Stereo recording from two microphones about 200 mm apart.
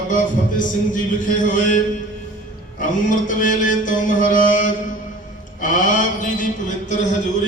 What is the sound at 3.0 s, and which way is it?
Mantra, 40° left (ahead or behind).